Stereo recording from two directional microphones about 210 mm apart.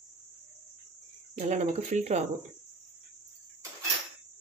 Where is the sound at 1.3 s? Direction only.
35° right (ahead or behind).